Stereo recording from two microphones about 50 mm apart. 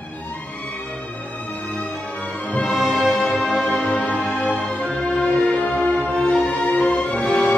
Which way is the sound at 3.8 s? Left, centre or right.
Left.